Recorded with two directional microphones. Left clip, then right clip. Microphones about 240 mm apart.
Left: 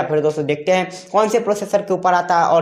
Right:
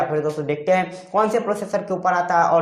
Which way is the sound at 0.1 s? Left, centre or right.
Left.